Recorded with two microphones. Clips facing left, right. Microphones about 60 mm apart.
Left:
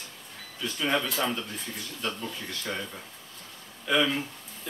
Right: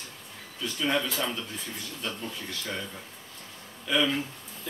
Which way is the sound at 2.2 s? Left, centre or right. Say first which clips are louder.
Left 1 dB; centre.